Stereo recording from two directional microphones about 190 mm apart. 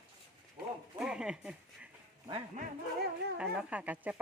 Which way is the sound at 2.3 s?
30° right (ahead or behind).